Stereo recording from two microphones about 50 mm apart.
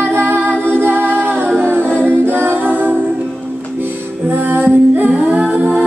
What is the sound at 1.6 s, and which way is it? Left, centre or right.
A capella, right.